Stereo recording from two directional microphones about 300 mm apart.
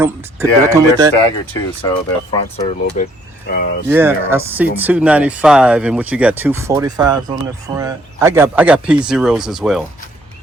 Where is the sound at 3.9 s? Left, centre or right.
Centre.